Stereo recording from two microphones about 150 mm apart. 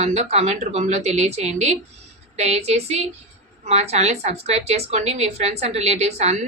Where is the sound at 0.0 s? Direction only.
45° right (ahead or behind).